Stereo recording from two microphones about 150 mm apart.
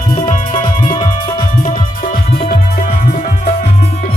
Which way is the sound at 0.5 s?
30° left (ahead or behind).